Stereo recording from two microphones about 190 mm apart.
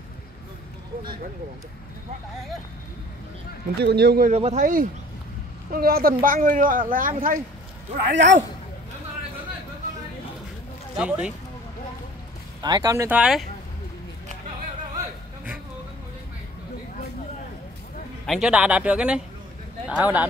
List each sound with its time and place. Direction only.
3.7 s speech: 60° right (ahead or behind)
4.3 s speech: 35° right (ahead or behind)
8.1 s speech: 70° right (ahead or behind)
11.0 s speech: 5° right (ahead or behind)
12.6 s speech: 20° right (ahead or behind)
13.2 s a man's voice: centre (ahead or behind)
18.2 s a man's voice: centre (ahead or behind)